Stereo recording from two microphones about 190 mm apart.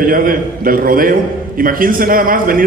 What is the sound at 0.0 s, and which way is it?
A man's voice, 45° right (ahead or behind).